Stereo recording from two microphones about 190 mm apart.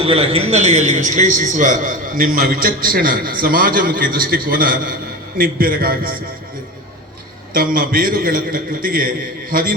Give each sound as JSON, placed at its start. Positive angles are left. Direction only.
{"t": 0.0, "sound": "a man's voice", "side_deg": -30}
{"t": 7.5, "sound": "a man's voice", "side_deg": -50}